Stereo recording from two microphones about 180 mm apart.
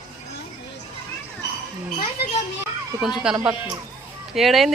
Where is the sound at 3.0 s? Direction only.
Centre (ahead or behind).